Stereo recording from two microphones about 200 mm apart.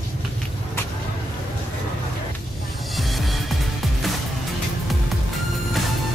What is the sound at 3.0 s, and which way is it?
Music, centre (ahead or behind).